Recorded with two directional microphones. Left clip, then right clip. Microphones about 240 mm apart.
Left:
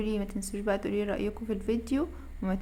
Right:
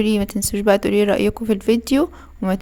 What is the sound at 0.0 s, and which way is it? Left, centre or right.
A woman's voice, right.